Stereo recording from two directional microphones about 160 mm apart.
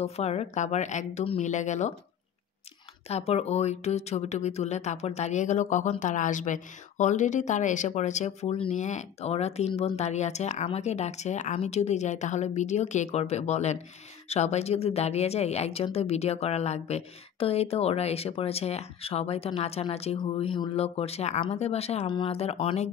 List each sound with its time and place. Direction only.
0.0 s speech: 40° left (ahead or behind)
3.1 s a woman's voice: 40° left (ahead or behind)